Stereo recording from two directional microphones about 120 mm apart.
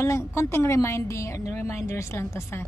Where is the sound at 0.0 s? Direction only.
25° left (ahead or behind).